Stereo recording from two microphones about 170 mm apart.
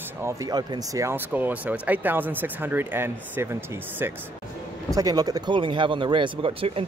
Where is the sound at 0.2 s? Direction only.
20° right (ahead or behind).